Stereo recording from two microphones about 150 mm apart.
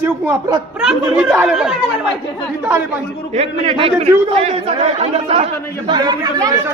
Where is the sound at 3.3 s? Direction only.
40° right (ahead or behind).